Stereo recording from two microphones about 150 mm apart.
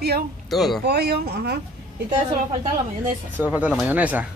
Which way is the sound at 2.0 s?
50° right (ahead or behind).